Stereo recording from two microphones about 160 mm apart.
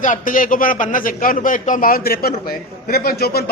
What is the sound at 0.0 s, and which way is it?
A man's voice, 55° left (ahead or behind).